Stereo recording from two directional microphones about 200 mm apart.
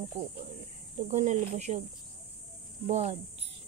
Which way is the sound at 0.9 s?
35° right (ahead or behind).